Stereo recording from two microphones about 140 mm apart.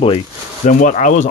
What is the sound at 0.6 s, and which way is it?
Speech, 65° left (ahead or behind).